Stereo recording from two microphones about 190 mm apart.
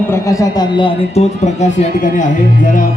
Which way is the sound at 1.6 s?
40° left (ahead or behind).